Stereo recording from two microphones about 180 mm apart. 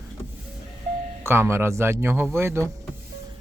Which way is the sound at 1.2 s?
15° right (ahead or behind).